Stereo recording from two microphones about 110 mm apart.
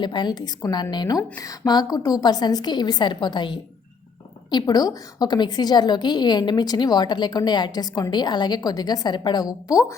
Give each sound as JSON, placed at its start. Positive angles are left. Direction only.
{"t": 0.0, "sound": "a woman's voice", "side_deg": 45}